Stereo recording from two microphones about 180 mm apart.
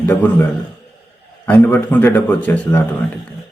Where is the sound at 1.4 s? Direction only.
10° left (ahead or behind).